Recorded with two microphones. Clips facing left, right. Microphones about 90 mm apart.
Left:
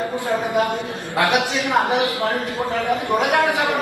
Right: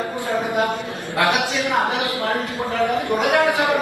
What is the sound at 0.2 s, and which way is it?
Speech, 20° left (ahead or behind).